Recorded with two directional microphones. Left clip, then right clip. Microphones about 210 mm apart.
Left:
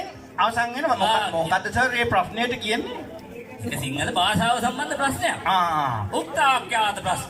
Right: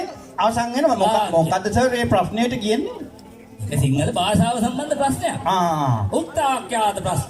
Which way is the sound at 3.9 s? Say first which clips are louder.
Right 1 dB; 25° right (ahead or behind).